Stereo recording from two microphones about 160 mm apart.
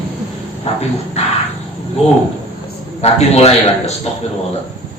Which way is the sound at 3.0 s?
40° left (ahead or behind).